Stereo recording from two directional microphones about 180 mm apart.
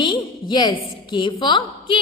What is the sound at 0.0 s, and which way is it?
A woman's voice, 25° left (ahead or behind).